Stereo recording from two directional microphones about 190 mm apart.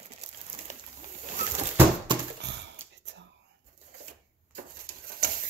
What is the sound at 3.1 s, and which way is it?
Whispering, 65° right (ahead or behind).